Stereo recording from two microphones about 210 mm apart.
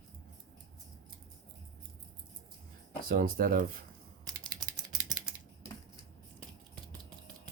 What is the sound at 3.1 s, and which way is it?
Speech, 40° right (ahead or behind).